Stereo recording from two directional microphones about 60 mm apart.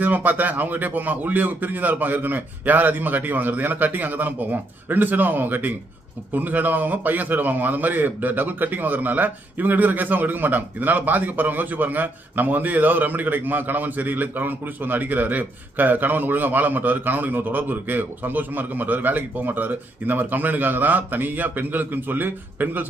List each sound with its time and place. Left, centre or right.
0.0 s a man's voice: right